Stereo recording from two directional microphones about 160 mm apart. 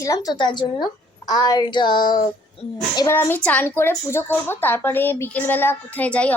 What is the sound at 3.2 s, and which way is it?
Speech, 10° left (ahead or behind).